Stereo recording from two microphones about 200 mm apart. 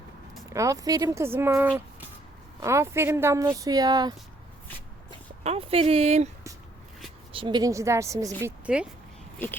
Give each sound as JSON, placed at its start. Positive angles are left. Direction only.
{"t": 0.5, "sound": "speech", "side_deg": -15}
{"t": 5.4, "sound": "speech", "side_deg": -30}
{"t": 7.3, "sound": "speech", "side_deg": -20}